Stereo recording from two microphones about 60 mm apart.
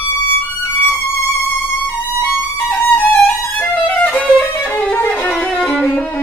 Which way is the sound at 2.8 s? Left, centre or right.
Left.